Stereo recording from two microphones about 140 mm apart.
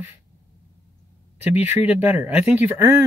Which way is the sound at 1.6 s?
15° right (ahead or behind).